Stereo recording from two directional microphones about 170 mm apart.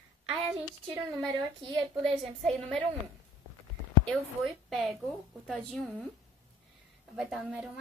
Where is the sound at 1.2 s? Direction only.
30° right (ahead or behind).